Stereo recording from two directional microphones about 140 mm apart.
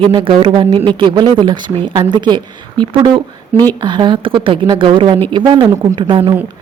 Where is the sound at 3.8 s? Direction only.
35° right (ahead or behind).